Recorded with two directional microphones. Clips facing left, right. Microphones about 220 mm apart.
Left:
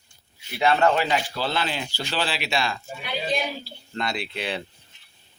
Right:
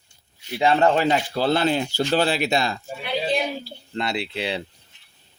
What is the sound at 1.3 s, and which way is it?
Speech, 45° right (ahead or behind).